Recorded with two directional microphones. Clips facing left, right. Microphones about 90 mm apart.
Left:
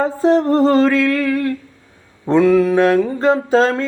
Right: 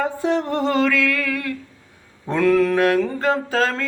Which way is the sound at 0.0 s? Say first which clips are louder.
Left 7 dB; 35° left (ahead or behind).